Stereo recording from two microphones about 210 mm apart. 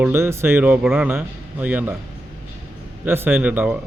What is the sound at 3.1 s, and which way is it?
Speech, 10° right (ahead or behind).